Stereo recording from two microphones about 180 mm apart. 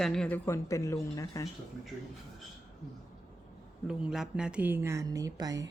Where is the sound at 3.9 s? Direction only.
5° right (ahead or behind); by 5.7 s 20° right (ahead or behind).